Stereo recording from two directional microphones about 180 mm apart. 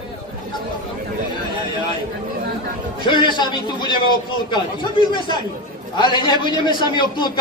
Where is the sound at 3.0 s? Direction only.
25° left (ahead or behind).